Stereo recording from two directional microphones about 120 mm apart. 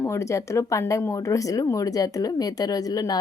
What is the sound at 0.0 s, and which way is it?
Speech, 25° left (ahead or behind).